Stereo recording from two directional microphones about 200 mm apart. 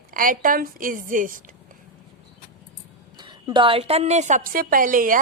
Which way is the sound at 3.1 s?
20° right (ahead or behind).